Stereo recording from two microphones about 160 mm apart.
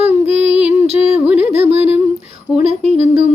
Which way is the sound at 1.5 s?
40° right (ahead or behind).